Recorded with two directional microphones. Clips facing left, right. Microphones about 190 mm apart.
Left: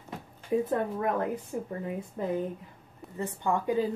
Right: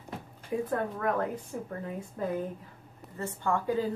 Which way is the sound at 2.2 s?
15° left (ahead or behind).